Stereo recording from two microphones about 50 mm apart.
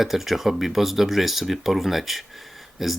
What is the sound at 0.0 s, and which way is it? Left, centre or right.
Speech, centre.